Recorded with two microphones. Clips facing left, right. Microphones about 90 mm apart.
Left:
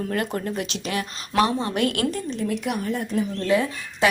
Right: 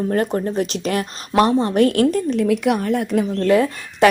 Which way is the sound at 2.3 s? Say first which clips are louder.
Right 9 dB; 65° right (ahead or behind).